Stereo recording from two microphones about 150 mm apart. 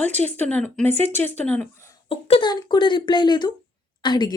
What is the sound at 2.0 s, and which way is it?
A woman's voice, 40° left (ahead or behind).